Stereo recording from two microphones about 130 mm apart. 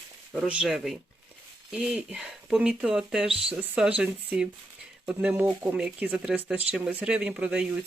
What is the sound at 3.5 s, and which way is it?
Speech, 10° right (ahead or behind).